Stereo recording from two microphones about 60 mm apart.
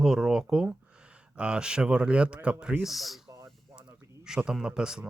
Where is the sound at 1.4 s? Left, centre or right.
Centre.